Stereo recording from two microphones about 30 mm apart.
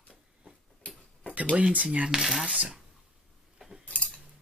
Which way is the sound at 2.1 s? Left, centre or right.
Centre.